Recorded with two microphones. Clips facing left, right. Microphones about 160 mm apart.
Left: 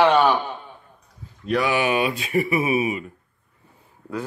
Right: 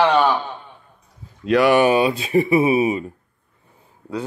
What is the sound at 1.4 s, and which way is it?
Speech, 80° right.